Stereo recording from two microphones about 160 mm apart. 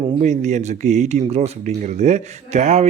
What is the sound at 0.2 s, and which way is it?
Speech, 45° right (ahead or behind).